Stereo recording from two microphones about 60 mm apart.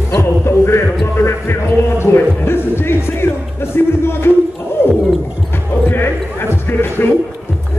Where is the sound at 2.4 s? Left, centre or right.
Left.